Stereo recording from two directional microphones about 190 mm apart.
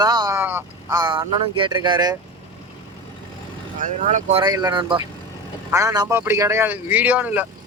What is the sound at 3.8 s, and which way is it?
Speech, 40° right (ahead or behind).